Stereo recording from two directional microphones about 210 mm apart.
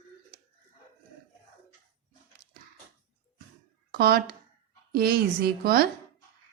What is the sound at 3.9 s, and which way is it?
A woman's voice, 45° right (ahead or behind).